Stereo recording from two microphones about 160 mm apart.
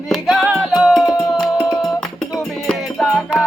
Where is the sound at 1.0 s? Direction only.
25° left (ahead or behind).